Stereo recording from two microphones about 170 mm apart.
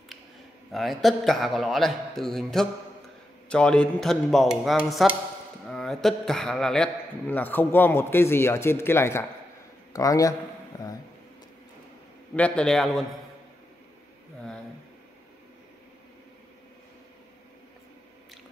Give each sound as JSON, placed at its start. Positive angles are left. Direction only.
{"t": 0.7, "sound": "a man's voice", "side_deg": 0}
{"t": 12.4, "sound": "a man's voice", "side_deg": 5}